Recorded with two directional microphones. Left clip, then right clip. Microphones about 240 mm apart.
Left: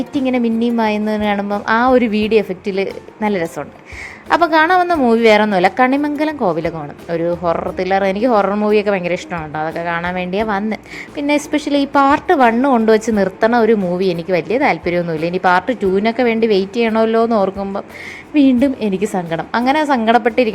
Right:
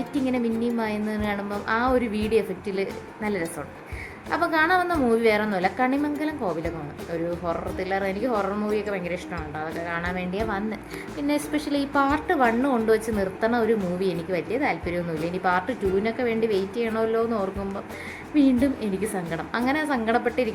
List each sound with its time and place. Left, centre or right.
0.1 s a woman's voice: left